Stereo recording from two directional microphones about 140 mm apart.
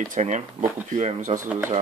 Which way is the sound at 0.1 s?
65° right (ahead or behind).